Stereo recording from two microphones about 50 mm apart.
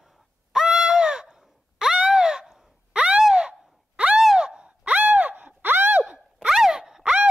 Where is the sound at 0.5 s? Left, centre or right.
Centre.